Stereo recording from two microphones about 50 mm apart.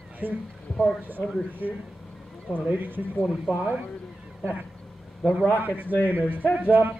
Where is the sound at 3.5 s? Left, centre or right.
Right.